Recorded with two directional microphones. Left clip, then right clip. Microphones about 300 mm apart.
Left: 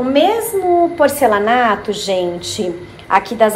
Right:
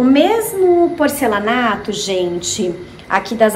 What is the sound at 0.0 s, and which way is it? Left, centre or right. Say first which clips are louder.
A woman's voice: right 1 dB; centre.